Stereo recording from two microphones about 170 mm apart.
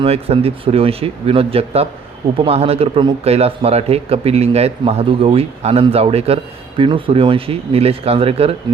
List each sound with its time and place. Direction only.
0.0 s speech: 35° right (ahead or behind)